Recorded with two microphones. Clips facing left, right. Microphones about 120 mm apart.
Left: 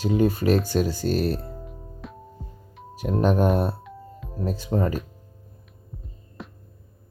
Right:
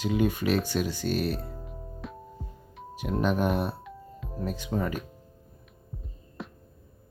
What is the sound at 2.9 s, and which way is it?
Speech, 40° left (ahead or behind).